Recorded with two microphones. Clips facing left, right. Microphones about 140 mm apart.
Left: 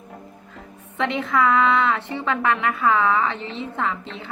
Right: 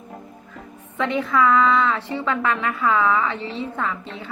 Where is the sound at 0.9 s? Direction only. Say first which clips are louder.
Right 1 dB; 20° left (ahead or behind).